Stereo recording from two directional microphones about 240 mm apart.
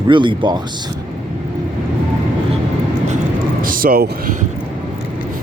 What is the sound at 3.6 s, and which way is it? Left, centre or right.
Speech, right.